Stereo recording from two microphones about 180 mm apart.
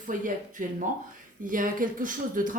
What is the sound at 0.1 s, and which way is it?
Speech, 50° right (ahead or behind).